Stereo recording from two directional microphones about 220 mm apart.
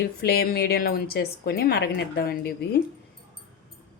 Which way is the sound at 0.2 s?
45° left (ahead or behind).